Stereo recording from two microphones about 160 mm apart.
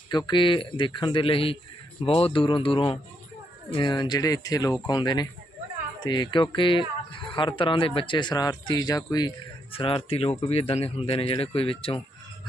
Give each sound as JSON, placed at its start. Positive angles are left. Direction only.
{"t": 0.1, "sound": "a man's voice", "side_deg": 25}
{"t": 9.7, "sound": "a man's voice", "side_deg": 35}